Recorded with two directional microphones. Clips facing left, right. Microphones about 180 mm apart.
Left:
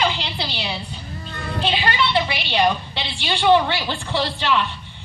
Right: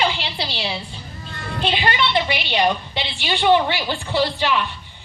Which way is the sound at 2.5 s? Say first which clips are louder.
Even; 15° right (ahead or behind).